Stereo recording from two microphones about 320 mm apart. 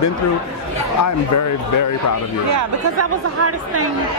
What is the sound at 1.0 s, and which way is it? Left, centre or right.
Speech, left.